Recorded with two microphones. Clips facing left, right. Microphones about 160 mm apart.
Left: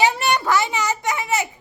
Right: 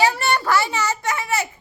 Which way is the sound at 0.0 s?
15° left (ahead or behind).